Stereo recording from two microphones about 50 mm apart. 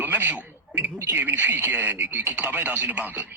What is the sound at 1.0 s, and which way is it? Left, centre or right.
Speech, right.